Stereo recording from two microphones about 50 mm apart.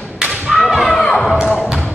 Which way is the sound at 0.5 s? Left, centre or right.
Centre.